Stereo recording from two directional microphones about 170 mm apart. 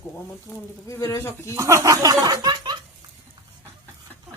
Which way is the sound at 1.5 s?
20° right (ahead or behind).